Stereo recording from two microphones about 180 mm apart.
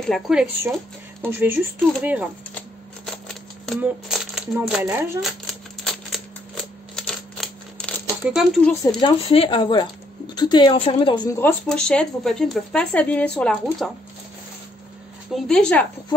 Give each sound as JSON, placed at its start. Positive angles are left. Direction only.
{"t": 0.0, "sound": "speech", "side_deg": 0}
{"t": 3.3, "sound": "a sound", "side_deg": 0}
{"t": 4.8, "sound": "speech", "side_deg": -15}
{"t": 5.2, "sound": "typewriter", "side_deg": 0}
{"t": 9.0, "sound": "a woman's voice", "side_deg": 30}
{"t": 11.2, "sound": "speech", "side_deg": 15}
{"t": 15.3, "sound": "speech", "side_deg": 5}